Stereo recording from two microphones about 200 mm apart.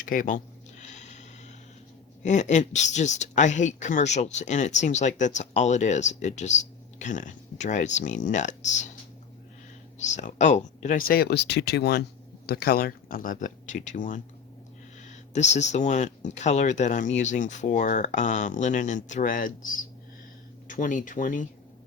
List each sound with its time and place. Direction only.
0.0 s a sound: 45° left (ahead or behind)
2.2 s speech: 35° left (ahead or behind)
10.0 s speech: 35° left (ahead or behind)
11.1 s speech: 50° left (ahead or behind)